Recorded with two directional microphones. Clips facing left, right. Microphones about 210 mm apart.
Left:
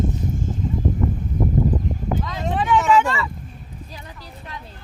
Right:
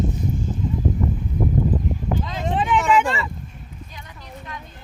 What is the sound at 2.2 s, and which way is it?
Vehicle, 20° right (ahead or behind).